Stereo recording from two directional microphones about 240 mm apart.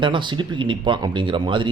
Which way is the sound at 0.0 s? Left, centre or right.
Centre.